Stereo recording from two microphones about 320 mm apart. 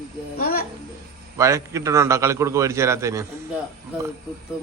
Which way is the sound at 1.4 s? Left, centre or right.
Centre.